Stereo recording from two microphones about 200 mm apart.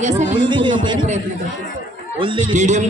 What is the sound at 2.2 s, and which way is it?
Speech, 30° right (ahead or behind).